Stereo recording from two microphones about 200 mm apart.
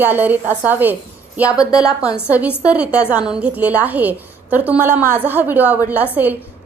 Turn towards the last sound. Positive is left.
turn(degrees=-10)  # may be behind; listen again after turning